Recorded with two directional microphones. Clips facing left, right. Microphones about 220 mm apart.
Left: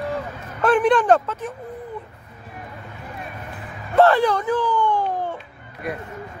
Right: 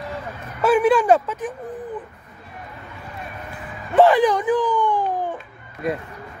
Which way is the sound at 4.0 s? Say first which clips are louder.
Right 1 dB; 15° right (ahead or behind).